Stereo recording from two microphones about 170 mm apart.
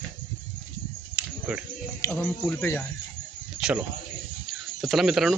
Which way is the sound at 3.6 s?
5° right (ahead or behind).